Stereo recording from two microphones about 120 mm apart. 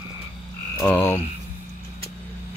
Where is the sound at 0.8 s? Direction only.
15° left (ahead or behind).